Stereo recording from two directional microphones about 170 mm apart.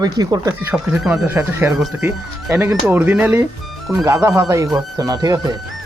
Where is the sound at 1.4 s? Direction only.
15° right (ahead or behind).